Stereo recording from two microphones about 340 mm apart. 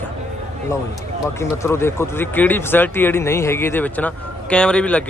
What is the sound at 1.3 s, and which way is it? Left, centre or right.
Speech, centre.